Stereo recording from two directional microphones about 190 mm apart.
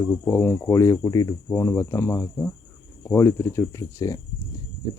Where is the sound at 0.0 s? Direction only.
15° left (ahead or behind).